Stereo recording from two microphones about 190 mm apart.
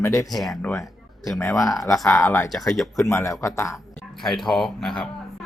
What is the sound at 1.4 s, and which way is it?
Speech, 15° left (ahead or behind).